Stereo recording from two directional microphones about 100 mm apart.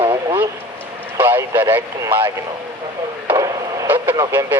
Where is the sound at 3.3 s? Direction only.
35° right (ahead or behind).